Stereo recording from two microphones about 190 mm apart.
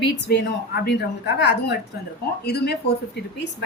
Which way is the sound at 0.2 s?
65° left (ahead or behind).